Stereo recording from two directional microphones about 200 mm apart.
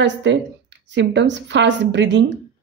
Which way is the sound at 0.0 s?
65° right (ahead or behind).